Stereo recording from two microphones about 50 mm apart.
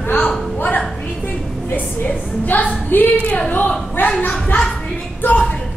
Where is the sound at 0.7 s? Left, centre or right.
Left.